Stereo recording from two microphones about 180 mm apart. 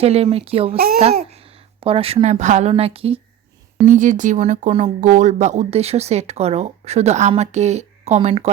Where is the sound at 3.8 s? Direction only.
45° right (ahead or behind).